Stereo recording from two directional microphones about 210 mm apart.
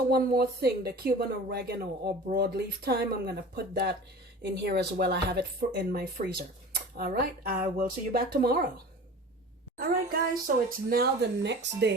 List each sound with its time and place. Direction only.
0.1 s speech: 45° right (ahead or behind)
9.7 s speech: 45° right (ahead or behind)